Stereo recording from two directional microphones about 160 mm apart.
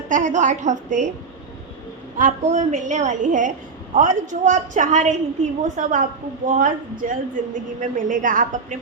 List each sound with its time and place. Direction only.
0.1 s a woman's voice: 50° right (ahead or behind)
2.1 s a woman's voice: 50° right (ahead or behind)